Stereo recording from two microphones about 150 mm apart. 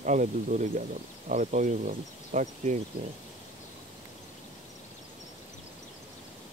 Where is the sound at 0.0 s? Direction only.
55° right (ahead or behind).